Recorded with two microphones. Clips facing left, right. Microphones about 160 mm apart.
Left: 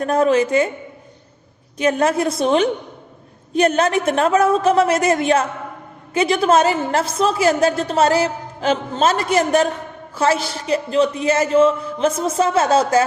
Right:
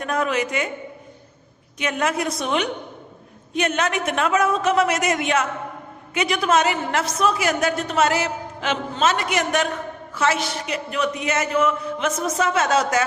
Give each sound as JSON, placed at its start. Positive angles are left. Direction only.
{"t": 0.0, "sound": "a woman's voice", "side_deg": 30}
{"t": 1.8, "sound": "a woman's voice", "side_deg": 35}